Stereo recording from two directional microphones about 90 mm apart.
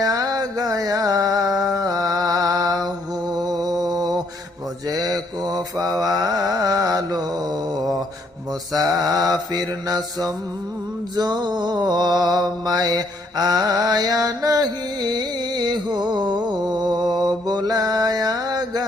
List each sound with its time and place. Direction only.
0.0 s a sound: 45° right (ahead or behind)
3.3 s mantra: 45° right (ahead or behind)
8.7 s mantra: 45° right (ahead or behind)